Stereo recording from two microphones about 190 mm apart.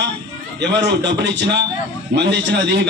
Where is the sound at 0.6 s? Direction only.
65° right (ahead or behind).